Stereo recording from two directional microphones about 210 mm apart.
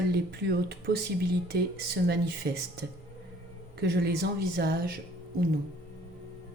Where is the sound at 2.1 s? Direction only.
50° right (ahead or behind).